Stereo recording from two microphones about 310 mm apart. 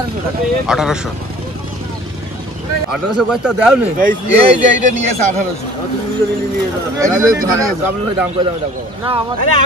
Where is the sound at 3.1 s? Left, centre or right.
Centre.